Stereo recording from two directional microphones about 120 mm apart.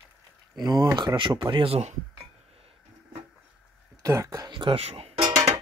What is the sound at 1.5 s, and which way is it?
Speech, 50° right (ahead or behind).